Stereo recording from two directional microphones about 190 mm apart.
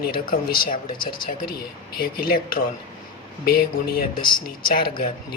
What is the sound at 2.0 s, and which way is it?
Speech, 50° left (ahead or behind).